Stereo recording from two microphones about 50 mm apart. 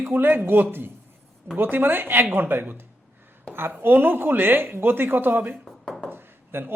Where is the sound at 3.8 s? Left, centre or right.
Right.